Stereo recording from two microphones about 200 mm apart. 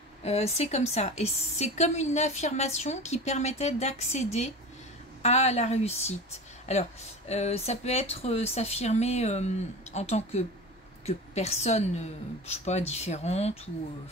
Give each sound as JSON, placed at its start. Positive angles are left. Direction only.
{"t": 0.2, "sound": "a woman's voice", "side_deg": 30}